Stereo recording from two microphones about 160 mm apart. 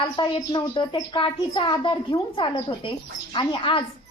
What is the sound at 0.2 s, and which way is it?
Speech, 30° left (ahead or behind).